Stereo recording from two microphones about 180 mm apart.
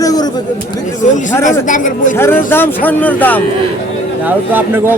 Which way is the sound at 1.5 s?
45° left (ahead or behind).